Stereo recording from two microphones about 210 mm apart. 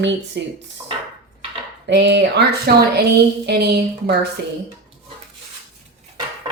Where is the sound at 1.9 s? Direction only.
55° right (ahead or behind).